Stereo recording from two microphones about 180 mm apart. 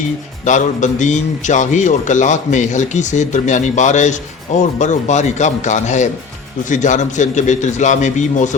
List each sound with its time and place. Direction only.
0.4 s a man's voice: 45° left (ahead or behind)